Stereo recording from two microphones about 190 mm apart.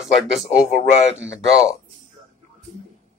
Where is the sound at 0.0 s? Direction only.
Centre (ahead or behind).